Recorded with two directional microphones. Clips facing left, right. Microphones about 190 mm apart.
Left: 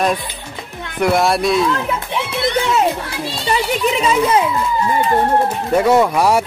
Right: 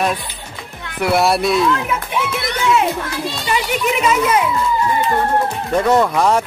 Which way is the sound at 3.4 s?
30° left (ahead or behind).